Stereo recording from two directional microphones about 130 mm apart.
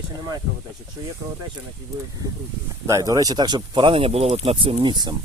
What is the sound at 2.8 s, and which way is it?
Speech, 25° right (ahead or behind).